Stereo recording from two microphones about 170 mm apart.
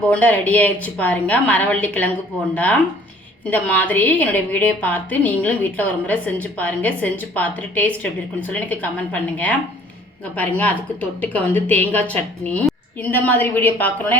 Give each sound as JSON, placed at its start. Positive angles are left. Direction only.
{"t": 0.1, "sound": "a woman's voice", "side_deg": 10}